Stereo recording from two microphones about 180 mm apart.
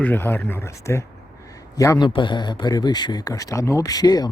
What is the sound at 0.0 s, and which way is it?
Speech, 10° left (ahead or behind).